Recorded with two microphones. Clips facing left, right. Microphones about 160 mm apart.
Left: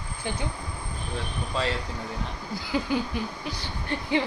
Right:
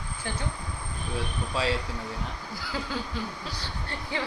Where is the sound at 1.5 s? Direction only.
5° right (ahead or behind).